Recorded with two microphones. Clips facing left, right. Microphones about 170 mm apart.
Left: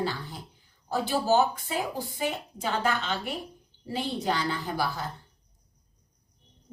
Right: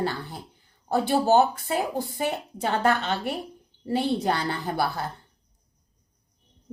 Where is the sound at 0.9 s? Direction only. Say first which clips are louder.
Right 4 dB; 50° right (ahead or behind).